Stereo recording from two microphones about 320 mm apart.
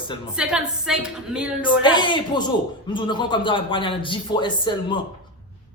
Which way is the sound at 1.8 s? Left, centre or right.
Centre.